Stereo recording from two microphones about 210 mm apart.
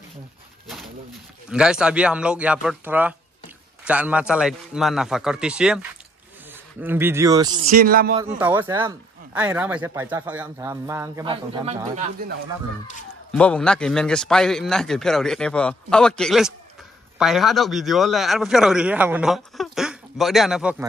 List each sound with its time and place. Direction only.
1.5 s a man's voice: 5° right (ahead or behind)
7.7 s speech: 45° right (ahead or behind)
8.4 s speech: 10° right (ahead or behind)
11.6 s speech: 35° right (ahead or behind)
13.3 s a man's voice: 5° left (ahead or behind)